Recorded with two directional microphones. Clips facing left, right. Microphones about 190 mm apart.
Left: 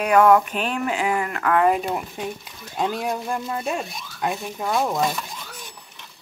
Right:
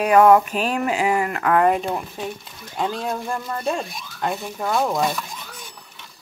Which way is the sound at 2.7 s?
15° left (ahead or behind).